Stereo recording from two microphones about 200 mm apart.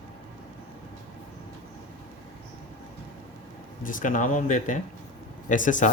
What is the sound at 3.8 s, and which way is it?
Speech, 40° left (ahead or behind).